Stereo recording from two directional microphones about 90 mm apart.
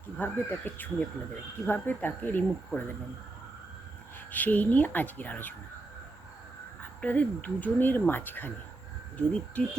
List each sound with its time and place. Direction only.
0.2 s speech: 20° left (ahead or behind)
4.3 s speech: 20° left (ahead or behind)
7.0 s speech: 15° left (ahead or behind)